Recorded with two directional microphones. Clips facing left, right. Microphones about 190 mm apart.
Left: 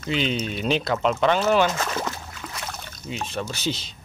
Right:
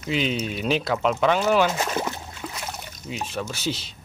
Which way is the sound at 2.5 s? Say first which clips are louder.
Right 1 dB; 15° right (ahead or behind).